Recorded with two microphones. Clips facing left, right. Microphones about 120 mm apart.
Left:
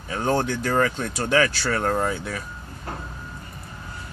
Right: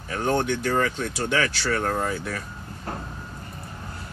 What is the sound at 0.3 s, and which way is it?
Speech, 40° left (ahead or behind).